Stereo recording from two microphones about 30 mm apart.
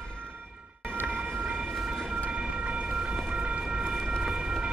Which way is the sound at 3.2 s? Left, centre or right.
Right.